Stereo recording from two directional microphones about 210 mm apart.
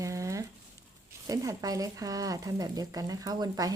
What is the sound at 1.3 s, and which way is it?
Speech, 15° right (ahead or behind).